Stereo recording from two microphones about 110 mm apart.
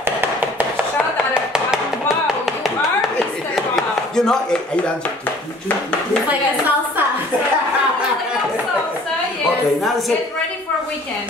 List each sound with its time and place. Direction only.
0.2 s chopping: 20° right (ahead or behind)
1.1 s chop: 5° right (ahead or behind)
2.2 s music: centre (ahead or behind)
3.7 s a sound: 5° left (ahead or behind)